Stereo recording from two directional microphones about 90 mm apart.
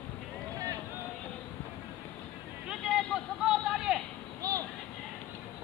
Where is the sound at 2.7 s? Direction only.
5° right (ahead or behind).